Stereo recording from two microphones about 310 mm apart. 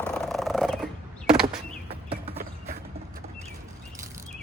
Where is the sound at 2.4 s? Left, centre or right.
Right.